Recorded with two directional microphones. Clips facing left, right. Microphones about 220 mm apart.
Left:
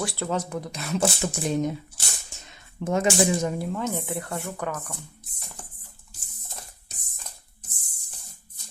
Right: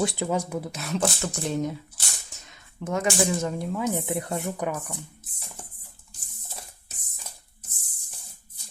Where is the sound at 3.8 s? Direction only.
15° right (ahead or behind).